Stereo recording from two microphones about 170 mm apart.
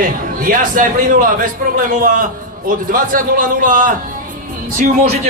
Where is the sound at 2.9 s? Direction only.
55° right (ahead or behind).